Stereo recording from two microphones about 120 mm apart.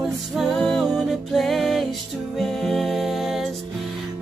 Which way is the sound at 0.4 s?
Centre (ahead or behind).